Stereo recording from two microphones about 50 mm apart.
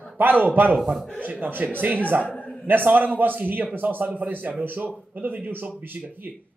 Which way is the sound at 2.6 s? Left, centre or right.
Right.